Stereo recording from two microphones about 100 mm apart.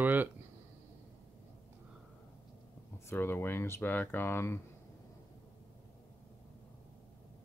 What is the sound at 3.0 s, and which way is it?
Speech, 20° left (ahead or behind).